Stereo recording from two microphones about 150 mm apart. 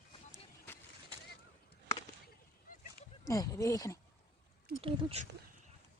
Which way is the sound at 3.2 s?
20° left (ahead or behind).